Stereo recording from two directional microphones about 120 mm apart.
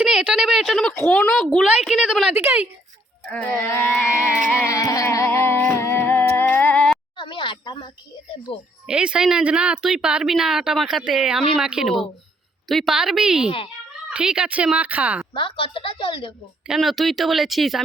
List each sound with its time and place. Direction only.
0.0 s speech: 5° right (ahead or behind)
1.5 s speech: 10° right (ahead or behind)
2.3 s speech: 15° right (ahead or behind)
3.2 s music: 10° left (ahead or behind)
4.7 s a sound: 25° left (ahead or behind); by 7.0 s 10° left (ahead or behind)
7.2 s a sound: 40° left (ahead or behind)
8.9 s speech: 10° right (ahead or behind)
15.3 s a woman's voice: 45° left (ahead or behind)
16.6 s speech: centre (ahead or behind)